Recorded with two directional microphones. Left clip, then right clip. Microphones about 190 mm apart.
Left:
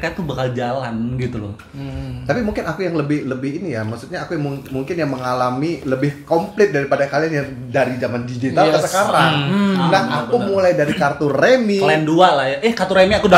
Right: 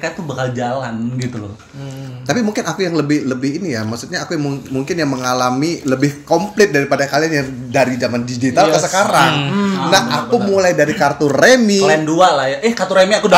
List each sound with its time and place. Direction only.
0.0 s speech: 15° left (ahead or behind)
2.2 s speech: 45° right (ahead or behind)
9.5 s speech: 35° left (ahead or behind)
9.8 s speech: 45° right (ahead or behind)
11.8 s speech: 15° left (ahead or behind)